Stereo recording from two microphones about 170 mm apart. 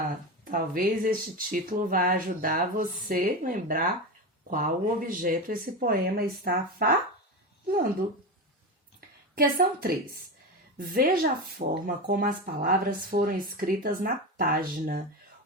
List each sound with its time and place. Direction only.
0.5 s speech: 55° right (ahead or behind)
9.0 s a sound: 60° right (ahead or behind)
10.8 s speech: 60° right (ahead or behind)